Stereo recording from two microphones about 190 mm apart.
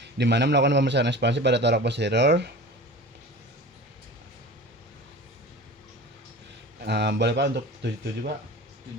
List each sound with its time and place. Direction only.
0.0 s a man's voice: 65° right (ahead or behind)
6.8 s a man's voice: 60° right (ahead or behind)